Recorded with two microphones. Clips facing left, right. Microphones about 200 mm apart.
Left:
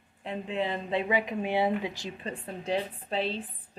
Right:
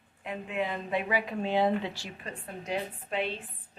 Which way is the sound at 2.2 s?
30° left (ahead or behind).